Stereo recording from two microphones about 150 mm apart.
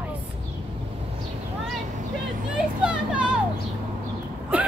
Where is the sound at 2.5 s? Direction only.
5° right (ahead or behind).